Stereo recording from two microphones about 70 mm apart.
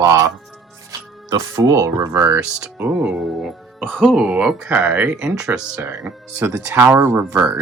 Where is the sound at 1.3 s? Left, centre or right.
Right.